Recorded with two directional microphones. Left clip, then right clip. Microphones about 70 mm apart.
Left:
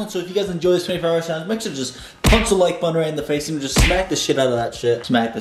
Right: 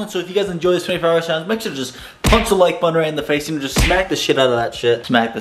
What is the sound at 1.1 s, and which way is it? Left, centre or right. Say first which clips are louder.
Speech: right 4 dB; centre.